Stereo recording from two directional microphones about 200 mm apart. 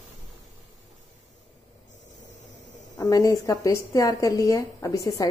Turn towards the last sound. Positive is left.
turn(degrees=15)  # may be behind; listen again after turning